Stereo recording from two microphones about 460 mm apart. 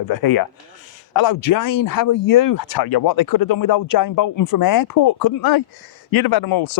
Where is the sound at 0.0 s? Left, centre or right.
Left.